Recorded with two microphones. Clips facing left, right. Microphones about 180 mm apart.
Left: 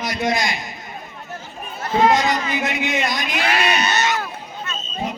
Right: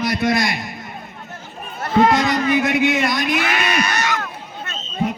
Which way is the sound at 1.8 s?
50° right (ahead or behind).